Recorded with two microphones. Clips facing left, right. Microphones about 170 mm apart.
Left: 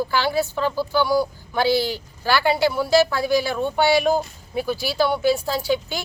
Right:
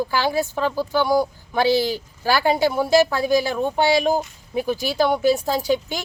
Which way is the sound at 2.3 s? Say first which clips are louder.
Even; 45° right (ahead or behind).